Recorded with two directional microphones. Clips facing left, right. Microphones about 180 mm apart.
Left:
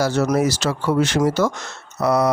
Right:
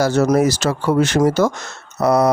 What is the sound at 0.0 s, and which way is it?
Speech, 45° right (ahead or behind).